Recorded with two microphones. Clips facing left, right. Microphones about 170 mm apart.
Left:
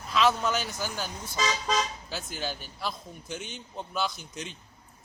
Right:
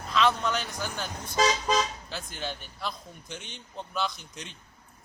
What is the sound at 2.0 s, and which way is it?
A man's voice, 5° left (ahead or behind).